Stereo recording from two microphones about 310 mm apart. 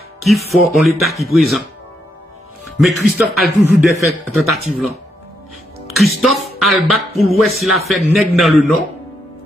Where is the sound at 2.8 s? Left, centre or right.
Centre.